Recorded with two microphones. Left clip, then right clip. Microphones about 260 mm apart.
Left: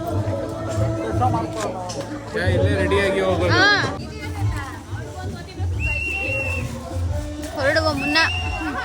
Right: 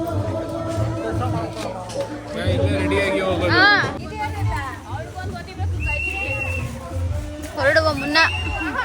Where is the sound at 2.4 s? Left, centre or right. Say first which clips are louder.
Left 2 dB; left.